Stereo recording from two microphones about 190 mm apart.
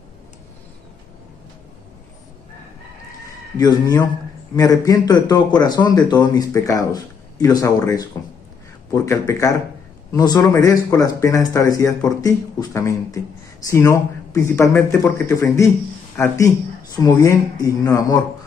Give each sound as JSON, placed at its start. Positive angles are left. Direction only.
{"t": 3.5, "sound": "a man's voice", "side_deg": 20}